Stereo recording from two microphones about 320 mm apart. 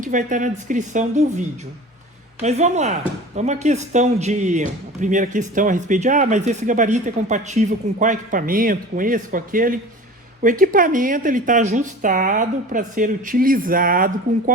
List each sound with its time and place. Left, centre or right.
0.0 s speech: right